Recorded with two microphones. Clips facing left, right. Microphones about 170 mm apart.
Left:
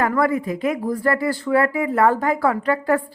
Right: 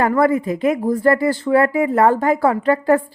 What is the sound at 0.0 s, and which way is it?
Speech, 25° right (ahead or behind).